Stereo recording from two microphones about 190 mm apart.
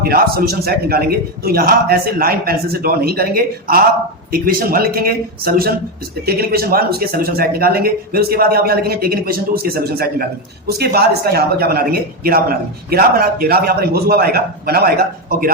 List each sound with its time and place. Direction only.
0.0 s a man's voice: 55° right (ahead or behind)